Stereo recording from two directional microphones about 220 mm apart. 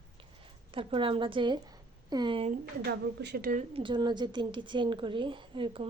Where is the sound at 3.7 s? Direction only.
20° right (ahead or behind).